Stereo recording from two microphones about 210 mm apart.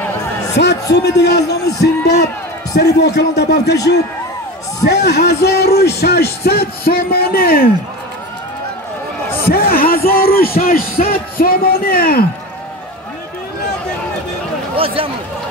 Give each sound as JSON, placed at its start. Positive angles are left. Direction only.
{"t": 0.6, "sound": "speech", "side_deg": 50}
{"t": 5.0, "sound": "speech", "side_deg": 50}
{"t": 9.5, "sound": "speech", "side_deg": 45}